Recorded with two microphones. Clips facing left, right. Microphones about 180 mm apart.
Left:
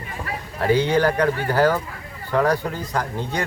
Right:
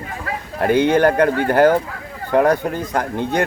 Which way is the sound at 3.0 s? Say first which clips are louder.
Right 6 dB; 50° right (ahead or behind).